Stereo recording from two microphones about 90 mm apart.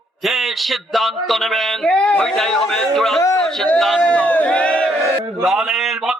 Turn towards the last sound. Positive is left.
turn(degrees=-5)  # may be behind; listen again after turning